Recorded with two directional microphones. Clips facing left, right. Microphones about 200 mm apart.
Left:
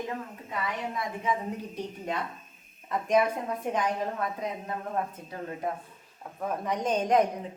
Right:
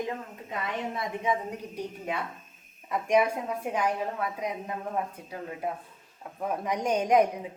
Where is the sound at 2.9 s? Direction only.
10° right (ahead or behind).